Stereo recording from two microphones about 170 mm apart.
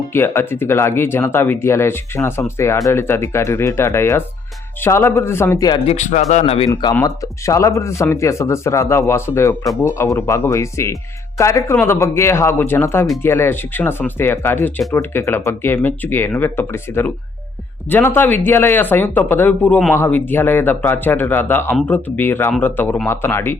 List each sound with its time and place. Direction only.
0.1 s speech: 15° left (ahead or behind)
5.8 s speech: 40° left (ahead or behind)
6.9 s speech: 20° left (ahead or behind)